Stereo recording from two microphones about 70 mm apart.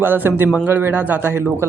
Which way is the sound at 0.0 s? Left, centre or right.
Right.